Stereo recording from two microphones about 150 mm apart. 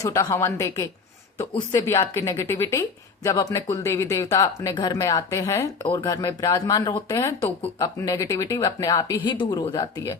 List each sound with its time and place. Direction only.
0.0 s speech: 20° left (ahead or behind)